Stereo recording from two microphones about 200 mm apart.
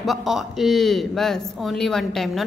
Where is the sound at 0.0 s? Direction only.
Centre (ahead or behind).